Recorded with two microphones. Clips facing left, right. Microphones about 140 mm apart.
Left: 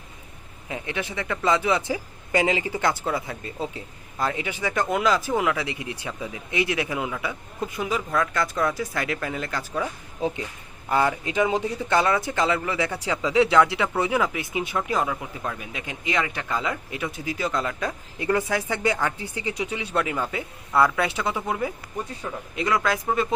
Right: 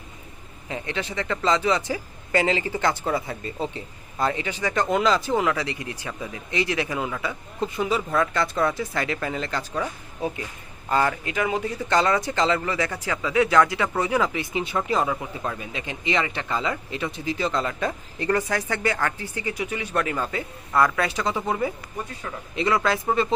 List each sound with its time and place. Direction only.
0.7 s speech: 10° left (ahead or behind)
3.0 s speech: centre (ahead or behind)
4.4 s speech: 10° left (ahead or behind)
5.6 s a man's voice: 15° left (ahead or behind)
11.3 s speech: 25° left (ahead or behind)
11.9 s speech: 10° left (ahead or behind)